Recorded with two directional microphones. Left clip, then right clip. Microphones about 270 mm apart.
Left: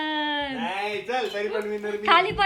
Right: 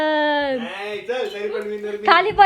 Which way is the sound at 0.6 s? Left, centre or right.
Centre.